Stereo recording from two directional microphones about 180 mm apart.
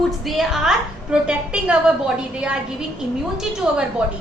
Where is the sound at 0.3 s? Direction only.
Centre (ahead or behind).